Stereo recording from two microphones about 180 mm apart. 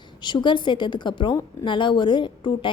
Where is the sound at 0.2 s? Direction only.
25° left (ahead or behind).